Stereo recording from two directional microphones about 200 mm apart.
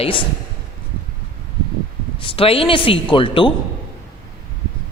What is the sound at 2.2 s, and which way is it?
A man's voice, 25° left (ahead or behind).